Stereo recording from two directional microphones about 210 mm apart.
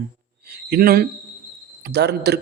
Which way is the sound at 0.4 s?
50° right (ahead or behind).